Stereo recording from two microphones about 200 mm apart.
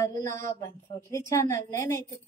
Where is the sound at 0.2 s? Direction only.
15° left (ahead or behind).